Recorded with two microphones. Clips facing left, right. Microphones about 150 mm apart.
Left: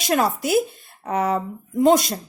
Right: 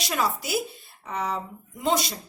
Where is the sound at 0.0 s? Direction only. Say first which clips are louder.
Left 7 dB; 50° left (ahead or behind).